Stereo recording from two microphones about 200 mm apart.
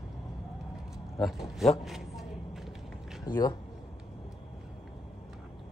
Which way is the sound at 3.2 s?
20° left (ahead or behind).